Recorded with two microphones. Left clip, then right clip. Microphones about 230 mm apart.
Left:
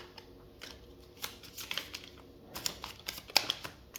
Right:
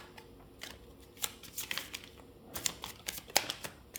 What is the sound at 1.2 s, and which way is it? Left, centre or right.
Computer keyboard, right.